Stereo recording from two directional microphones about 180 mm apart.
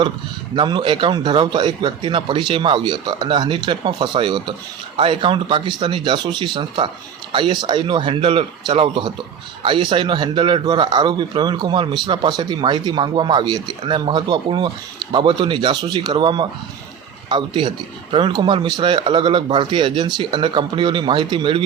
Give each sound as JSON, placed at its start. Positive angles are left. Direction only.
{"t": 0.5, "sound": "a man's voice", "side_deg": -25}